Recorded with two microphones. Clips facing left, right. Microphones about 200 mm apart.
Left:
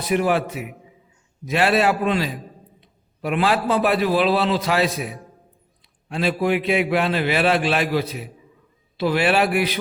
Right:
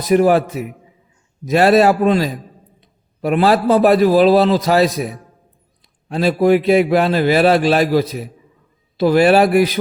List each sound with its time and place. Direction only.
0.0 s a man's voice: 40° right (ahead or behind)